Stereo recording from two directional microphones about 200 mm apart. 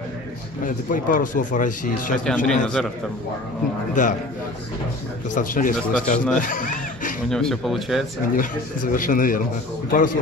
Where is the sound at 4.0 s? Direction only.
40° left (ahead or behind).